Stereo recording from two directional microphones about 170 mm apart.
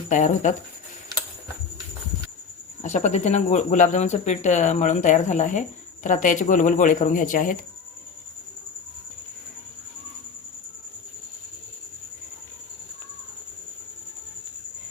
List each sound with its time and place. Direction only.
0.1 s speech: 45° left (ahead or behind)
2.8 s speech: 45° left (ahead or behind)